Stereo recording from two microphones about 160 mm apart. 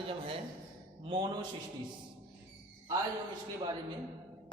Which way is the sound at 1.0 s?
35° right (ahead or behind).